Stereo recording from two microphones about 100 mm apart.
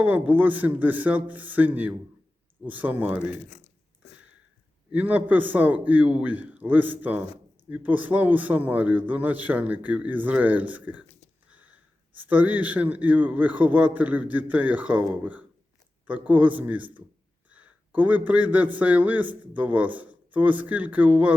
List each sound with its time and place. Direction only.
0.0 s speech: 15° right (ahead or behind)
4.9 s speech: 15° right (ahead or behind)